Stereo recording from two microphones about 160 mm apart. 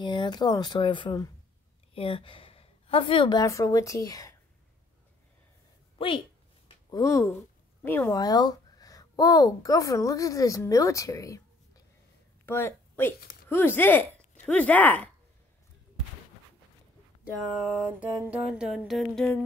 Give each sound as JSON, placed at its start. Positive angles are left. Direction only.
{"t": 0.0, "sound": "a woman's voice", "side_deg": 30}
{"t": 5.9, "sound": "a woman's voice", "side_deg": 35}
{"t": 6.7, "sound": "a sound", "side_deg": 20}
{"t": 7.8, "sound": "speech", "side_deg": 10}
{"t": 8.1, "sound": "speech", "side_deg": 25}
{"t": 17.2, "sound": "a sound", "side_deg": -10}